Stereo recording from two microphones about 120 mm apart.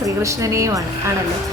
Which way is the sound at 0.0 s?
25° right (ahead or behind).